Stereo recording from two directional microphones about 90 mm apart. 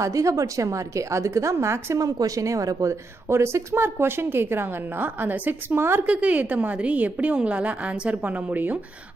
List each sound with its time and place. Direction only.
0.0 s a woman's voice: 35° right (ahead or behind); by 8.7 s 20° right (ahead or behind)